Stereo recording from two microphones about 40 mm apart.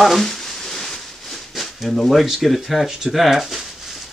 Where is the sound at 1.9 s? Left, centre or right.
Centre.